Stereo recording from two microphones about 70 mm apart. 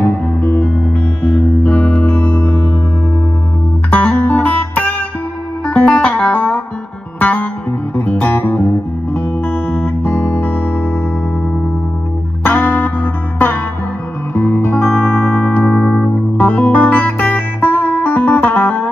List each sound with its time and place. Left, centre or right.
0.0 s music: left
3.9 s music: left
12.4 s music: left
16.3 s music: left